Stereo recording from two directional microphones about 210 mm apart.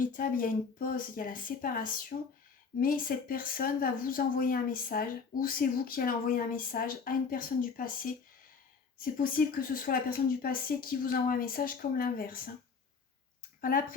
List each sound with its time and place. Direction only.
0.0 s speech: 40° left (ahead or behind)
9.1 s speech: 40° left (ahead or behind)
13.6 s speech: 40° left (ahead or behind)